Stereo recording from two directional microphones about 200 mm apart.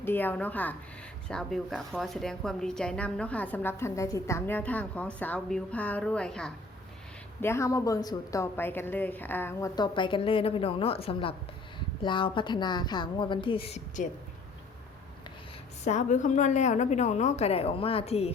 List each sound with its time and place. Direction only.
0.0 s a woman's voice: 10° left (ahead or behind)
7.4 s a woman's voice: 15° left (ahead or behind); by 14.1 s 35° left (ahead or behind)
15.8 s a woman's voice: 35° left (ahead or behind)